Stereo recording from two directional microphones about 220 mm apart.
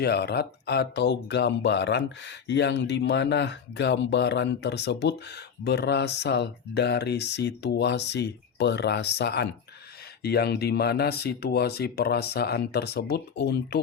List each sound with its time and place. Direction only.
0.0 s speech: 50° left (ahead or behind)